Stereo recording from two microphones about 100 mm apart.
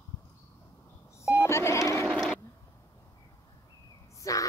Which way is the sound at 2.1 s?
5° right (ahead or behind).